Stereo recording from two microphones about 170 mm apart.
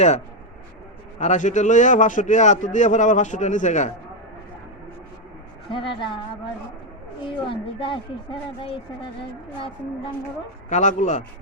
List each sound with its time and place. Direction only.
1.2 s a man's voice: 45° left (ahead or behind)
5.7 s a woman's voice: 30° left (ahead or behind)
7.3 s a woman's voice: 30° left (ahead or behind)
10.7 s a man's voice: 45° left (ahead or behind)